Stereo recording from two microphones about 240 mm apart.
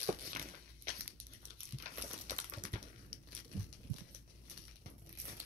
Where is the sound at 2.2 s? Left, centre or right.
Right.